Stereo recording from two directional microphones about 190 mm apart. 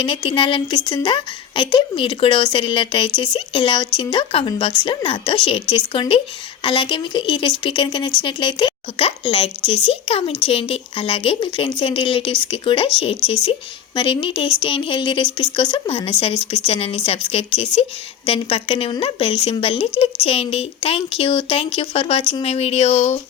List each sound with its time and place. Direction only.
0.0 s speech: 25° left (ahead or behind)